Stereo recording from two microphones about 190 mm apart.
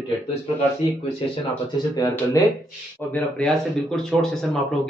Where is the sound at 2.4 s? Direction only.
15° left (ahead or behind).